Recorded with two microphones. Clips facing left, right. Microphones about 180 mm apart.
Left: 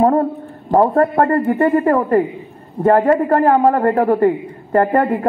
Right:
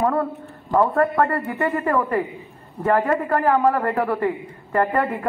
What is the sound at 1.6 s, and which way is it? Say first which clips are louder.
A woman's voice: left 5 dB; 40° left (ahead or behind).